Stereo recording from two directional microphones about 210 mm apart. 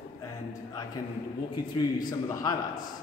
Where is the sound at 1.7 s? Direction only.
20° left (ahead or behind).